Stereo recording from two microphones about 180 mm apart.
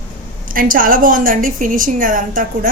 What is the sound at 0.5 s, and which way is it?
A woman's voice, 50° right (ahead or behind).